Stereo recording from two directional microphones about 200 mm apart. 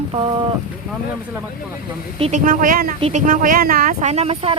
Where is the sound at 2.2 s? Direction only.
35° right (ahead or behind).